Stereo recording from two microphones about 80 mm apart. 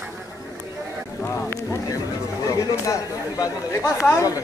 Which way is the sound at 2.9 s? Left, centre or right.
Left.